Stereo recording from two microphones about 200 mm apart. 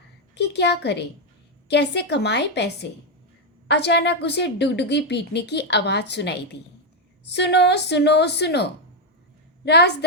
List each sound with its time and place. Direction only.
0.3 s a woman's voice: 55° left (ahead or behind)
3.7 s a woman's voice: 60° left (ahead or behind)